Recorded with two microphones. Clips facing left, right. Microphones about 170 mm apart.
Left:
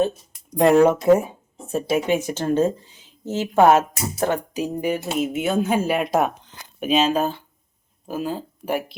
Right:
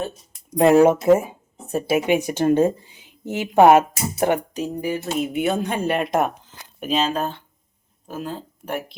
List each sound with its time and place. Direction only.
0.5 s speech: centre (ahead or behind)
4.7 s a sound: 20° left (ahead or behind)
5.2 s speech: centre (ahead or behind)